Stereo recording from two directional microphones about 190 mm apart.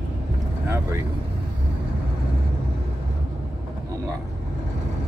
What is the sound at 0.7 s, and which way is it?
Speech, 15° right (ahead or behind).